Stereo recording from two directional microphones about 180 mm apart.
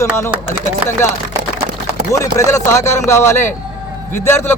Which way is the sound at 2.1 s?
15° left (ahead or behind).